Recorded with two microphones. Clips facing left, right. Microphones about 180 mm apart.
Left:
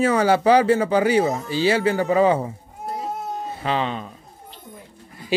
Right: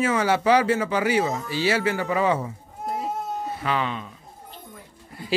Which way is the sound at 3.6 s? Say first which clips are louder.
Left 3 dB; 30° left (ahead or behind).